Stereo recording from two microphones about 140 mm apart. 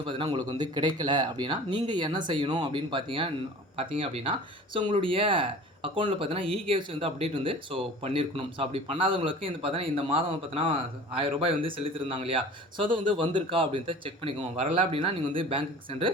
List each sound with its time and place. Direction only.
0.0 s speech: 35° right (ahead or behind)